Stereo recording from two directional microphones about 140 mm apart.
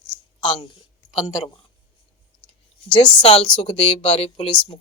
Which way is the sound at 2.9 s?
40° left (ahead or behind).